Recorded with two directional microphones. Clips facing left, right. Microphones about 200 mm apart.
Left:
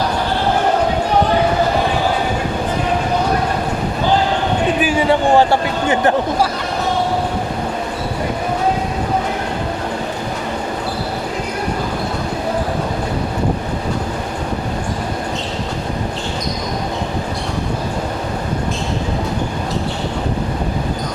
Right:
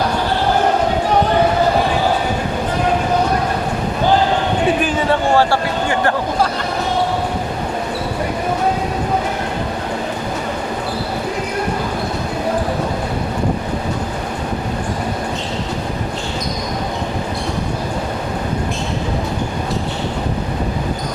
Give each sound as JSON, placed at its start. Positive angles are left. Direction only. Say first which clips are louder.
{"t": 4.8, "sound": "a man's voice", "louder": "left 2 dB", "side_deg": 10}